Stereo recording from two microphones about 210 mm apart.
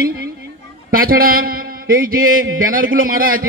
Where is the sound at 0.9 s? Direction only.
45° right (ahead or behind).